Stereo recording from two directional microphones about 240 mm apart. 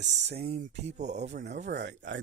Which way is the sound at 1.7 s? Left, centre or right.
Right.